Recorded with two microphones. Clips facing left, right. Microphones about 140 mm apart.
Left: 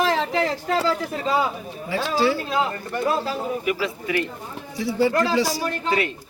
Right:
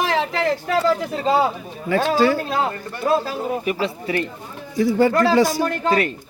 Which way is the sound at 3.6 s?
35° right (ahead or behind).